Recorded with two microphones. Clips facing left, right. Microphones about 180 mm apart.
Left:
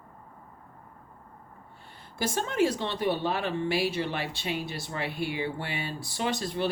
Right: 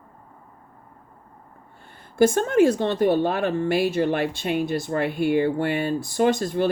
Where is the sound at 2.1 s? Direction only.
50° right (ahead or behind).